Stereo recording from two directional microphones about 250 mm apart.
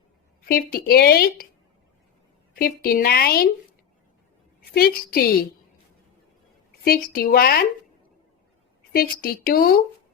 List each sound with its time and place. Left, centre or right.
0.4 s speech: left
2.6 s speech: left
4.7 s speech: left
6.8 s speech: left
8.9 s speech: left